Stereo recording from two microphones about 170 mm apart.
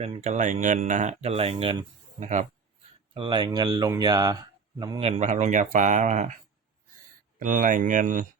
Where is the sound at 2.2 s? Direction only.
45° right (ahead or behind).